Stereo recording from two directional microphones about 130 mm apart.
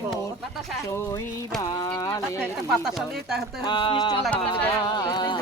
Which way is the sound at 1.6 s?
30° left (ahead or behind).